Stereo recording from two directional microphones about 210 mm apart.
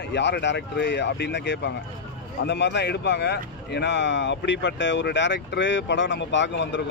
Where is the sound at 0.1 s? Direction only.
55° left (ahead or behind).